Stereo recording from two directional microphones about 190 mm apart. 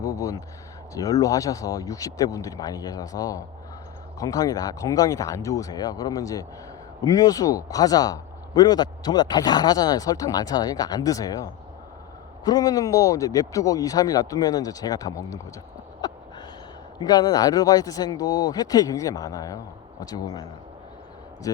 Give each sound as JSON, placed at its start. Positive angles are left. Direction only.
{"t": 0.0, "sound": "speech", "side_deg": 15}
{"t": 12.5, "sound": "speech", "side_deg": 20}
{"t": 17.0, "sound": "speech", "side_deg": 20}